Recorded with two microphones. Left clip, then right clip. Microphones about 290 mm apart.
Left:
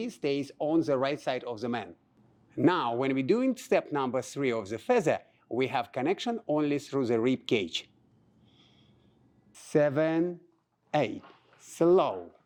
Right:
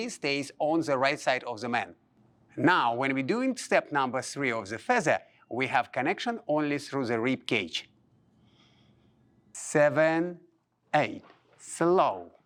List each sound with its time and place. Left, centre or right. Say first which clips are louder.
0.0 s speech: right 1 dB; right
9.5 s speech: right 2 dB; right